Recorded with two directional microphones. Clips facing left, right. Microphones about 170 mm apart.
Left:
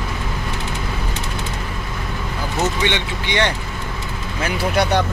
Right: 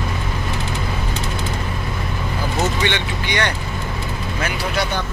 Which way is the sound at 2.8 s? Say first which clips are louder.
Even; 20° left (ahead or behind).